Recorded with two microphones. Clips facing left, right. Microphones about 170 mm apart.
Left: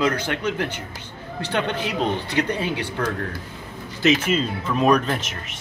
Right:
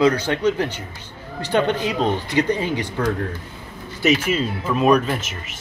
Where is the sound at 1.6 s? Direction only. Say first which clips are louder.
Right 3 dB; 15° right (ahead or behind).